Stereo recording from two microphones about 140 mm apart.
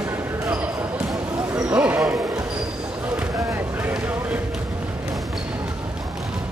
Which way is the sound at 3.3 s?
15° right (ahead or behind).